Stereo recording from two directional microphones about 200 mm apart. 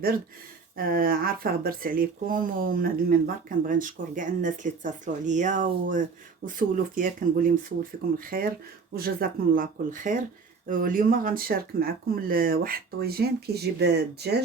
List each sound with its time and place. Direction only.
0.8 s speech: 45° right (ahead or behind)